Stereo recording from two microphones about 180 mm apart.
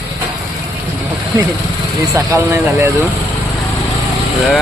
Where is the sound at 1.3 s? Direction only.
20° right (ahead or behind).